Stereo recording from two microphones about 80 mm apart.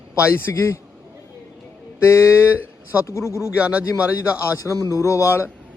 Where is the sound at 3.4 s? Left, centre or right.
Centre.